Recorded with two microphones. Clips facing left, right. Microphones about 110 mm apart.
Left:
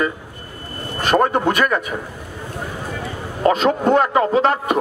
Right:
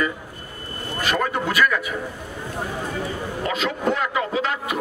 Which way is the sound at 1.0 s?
40° left (ahead or behind).